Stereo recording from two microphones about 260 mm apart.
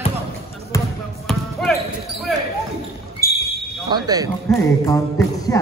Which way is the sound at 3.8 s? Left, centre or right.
Centre.